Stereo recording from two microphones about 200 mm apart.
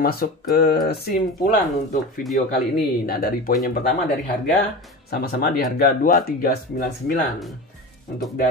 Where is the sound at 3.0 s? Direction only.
50° left (ahead or behind).